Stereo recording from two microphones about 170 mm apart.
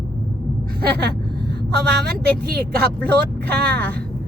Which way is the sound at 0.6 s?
65° right (ahead or behind).